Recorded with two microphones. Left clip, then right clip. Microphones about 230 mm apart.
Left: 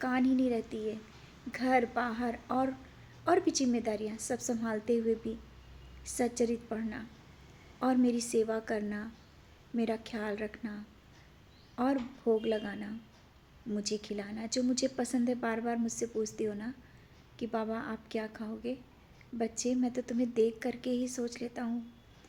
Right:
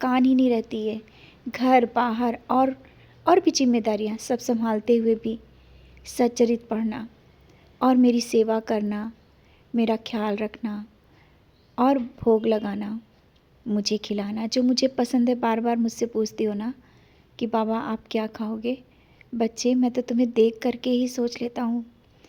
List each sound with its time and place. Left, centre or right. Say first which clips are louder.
0.0 s a woman's voice: right 10 dB; right